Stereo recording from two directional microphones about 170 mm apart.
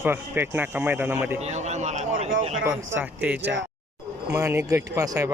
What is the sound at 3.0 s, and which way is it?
Speech, 10° right (ahead or behind).